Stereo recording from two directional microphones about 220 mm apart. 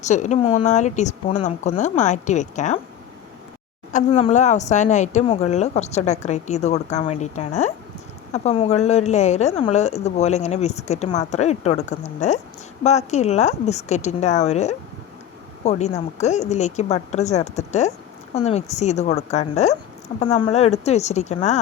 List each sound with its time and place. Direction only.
0.0 s a woman's voice: 30° left (ahead or behind)
3.9 s a woman's voice: 30° left (ahead or behind)